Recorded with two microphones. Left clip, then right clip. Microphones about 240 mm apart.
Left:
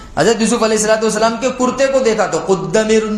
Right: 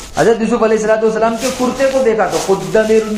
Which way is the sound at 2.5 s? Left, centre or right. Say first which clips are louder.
Right 1 dB; left.